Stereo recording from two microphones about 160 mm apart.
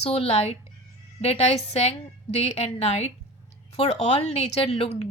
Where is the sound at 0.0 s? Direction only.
40° left (ahead or behind).